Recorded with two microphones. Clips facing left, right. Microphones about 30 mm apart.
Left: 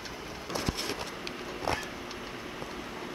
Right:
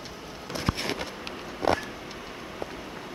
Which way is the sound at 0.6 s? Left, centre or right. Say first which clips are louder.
Right 6 dB; right.